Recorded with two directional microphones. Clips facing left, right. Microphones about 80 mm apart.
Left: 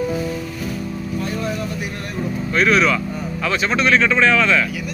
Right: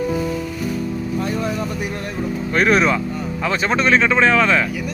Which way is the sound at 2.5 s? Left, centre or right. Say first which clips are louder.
Even; right.